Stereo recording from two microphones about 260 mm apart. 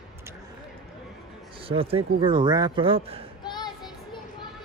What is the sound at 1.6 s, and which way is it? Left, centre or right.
Speech, right.